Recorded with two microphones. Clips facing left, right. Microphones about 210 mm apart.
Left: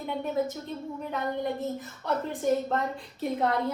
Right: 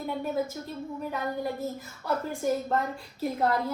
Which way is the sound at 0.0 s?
5° right (ahead or behind).